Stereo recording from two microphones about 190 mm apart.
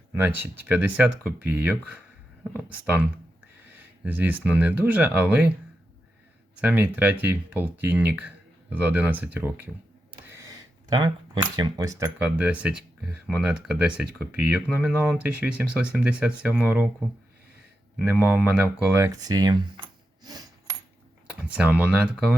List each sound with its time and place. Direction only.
0.1 s speech: 10° right (ahead or behind)
6.6 s speech: 10° right (ahead or behind)
10.2 s a sound: 15° right (ahead or behind)
11.5 s speech: 20° right (ahead or behind)
18.0 s speech: 10° right (ahead or behind)
20.2 s coin: 20° right (ahead or behind)
21.2 s speech: 5° right (ahead or behind)